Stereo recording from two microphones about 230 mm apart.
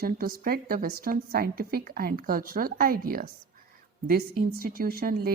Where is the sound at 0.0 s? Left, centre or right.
Right.